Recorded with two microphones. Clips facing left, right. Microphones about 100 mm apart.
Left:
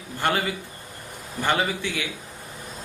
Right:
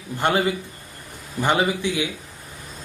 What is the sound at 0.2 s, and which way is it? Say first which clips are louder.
A man's voice: right 4 dB; 20° right (ahead or behind).